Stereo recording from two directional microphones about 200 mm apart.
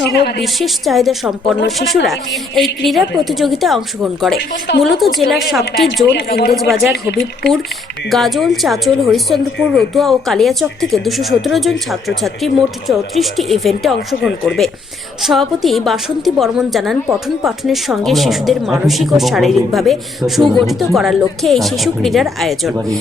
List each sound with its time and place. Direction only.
0.0 s a woman's voice: 55° left (ahead or behind)
0.4 s a woman's voice: centre (ahead or behind)
6.1 s a woman's voice: 50° left (ahead or behind)
8.1 s a woman's voice: centre (ahead or behind)